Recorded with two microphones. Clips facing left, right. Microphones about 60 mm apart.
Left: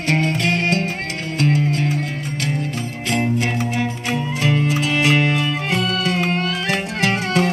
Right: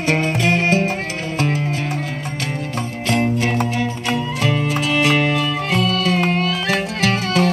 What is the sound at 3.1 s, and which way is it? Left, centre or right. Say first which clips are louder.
Music: right 2 dB; centre.